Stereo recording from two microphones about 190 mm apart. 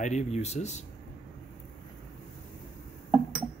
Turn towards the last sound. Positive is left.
turn(degrees=-10)  # may be behind; listen again after turning